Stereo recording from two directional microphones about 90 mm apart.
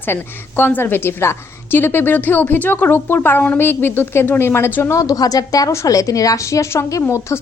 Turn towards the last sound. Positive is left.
turn(degrees=35)  # may be behind; listen again after turning